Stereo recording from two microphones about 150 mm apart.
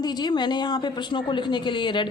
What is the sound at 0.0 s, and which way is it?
Speech, 30° left (ahead or behind).